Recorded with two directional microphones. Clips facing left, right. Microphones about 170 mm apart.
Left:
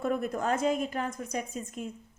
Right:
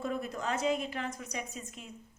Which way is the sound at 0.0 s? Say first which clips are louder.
Left 5 dB; 55° left (ahead or behind).